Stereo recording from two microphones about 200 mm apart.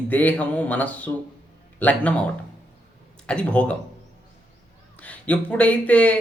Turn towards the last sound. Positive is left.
turn(degrees=5)  # may be behind; listen again after turning